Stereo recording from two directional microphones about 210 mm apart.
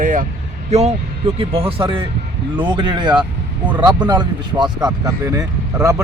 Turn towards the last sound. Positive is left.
turn(degrees=-15)  # may be behind; listen again after turning